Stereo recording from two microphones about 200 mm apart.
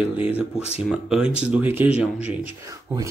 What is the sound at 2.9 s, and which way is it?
Speech, 10° right (ahead or behind).